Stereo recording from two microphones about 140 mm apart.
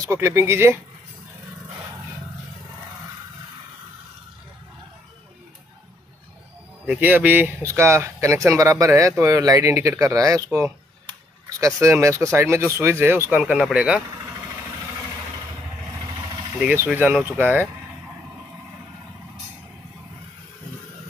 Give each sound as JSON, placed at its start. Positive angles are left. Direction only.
{"t": 0.1, "sound": "speech", "side_deg": -20}
{"t": 6.9, "sound": "speech", "side_deg": -10}
{"t": 11.6, "sound": "speech", "side_deg": -20}
{"t": 13.4, "sound": "speech", "side_deg": -5}
{"t": 16.5, "sound": "speech", "side_deg": -10}